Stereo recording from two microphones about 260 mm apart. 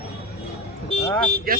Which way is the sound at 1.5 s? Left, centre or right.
Right.